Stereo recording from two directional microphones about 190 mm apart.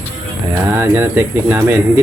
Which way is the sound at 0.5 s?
10° right (ahead or behind).